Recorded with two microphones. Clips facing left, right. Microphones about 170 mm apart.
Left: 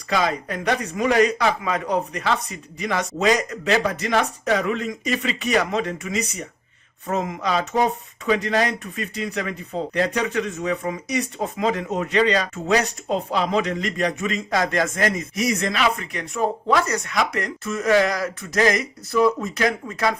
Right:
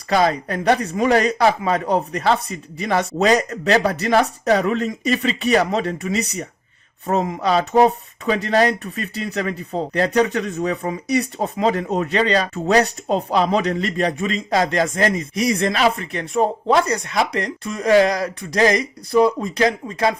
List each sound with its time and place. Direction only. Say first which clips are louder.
0.1 s speech: right 5 dB; 35° right (ahead or behind)
16.4 s speech: right 3 dB; 25° right (ahead or behind)